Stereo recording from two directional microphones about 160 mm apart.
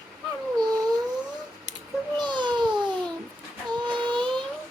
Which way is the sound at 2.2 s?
30° right (ahead or behind).